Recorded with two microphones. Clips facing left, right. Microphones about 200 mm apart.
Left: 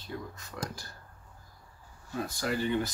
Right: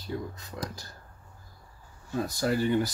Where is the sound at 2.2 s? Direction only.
40° right (ahead or behind).